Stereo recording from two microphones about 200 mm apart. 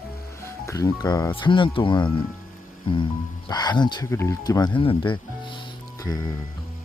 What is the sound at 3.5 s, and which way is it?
Speech, 20° left (ahead or behind).